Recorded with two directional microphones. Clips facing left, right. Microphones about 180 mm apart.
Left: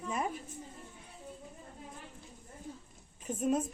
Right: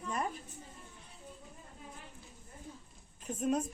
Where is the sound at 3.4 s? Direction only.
Centre (ahead or behind).